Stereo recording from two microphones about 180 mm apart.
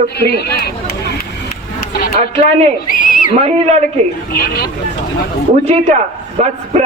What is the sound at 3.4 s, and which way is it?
Speech, 35° right (ahead or behind).